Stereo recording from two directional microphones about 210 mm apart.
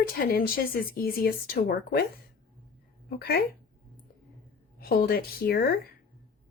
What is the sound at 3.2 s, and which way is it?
Speech, 45° left (ahead or behind).